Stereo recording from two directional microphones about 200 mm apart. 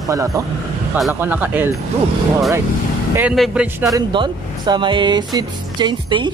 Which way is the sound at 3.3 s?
Centre (ahead or behind).